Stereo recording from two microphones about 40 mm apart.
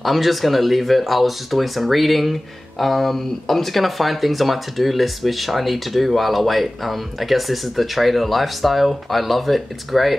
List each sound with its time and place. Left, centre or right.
0.0 s speech: centre